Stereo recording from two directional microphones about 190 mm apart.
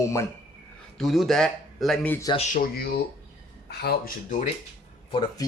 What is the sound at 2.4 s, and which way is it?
Speech, 45° left (ahead or behind).